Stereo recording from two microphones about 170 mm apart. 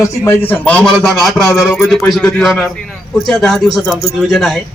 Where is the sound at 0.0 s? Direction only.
15° left (ahead or behind).